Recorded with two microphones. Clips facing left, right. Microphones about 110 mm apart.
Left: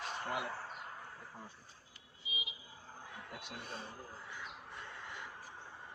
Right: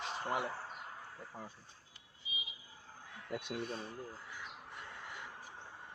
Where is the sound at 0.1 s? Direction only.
25° right (ahead or behind).